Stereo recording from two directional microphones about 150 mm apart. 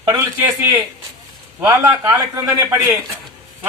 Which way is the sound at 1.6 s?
20° right (ahead or behind).